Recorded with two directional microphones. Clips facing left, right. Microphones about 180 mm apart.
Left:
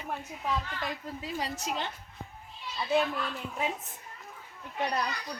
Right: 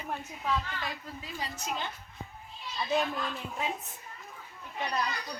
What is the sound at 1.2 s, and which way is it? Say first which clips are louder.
Speech: left 4 dB; 75° left (ahead or behind).